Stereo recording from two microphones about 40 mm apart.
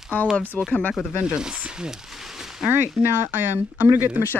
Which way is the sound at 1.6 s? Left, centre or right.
Right.